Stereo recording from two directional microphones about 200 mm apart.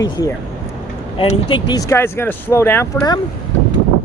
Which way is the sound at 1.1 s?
25° left (ahead or behind).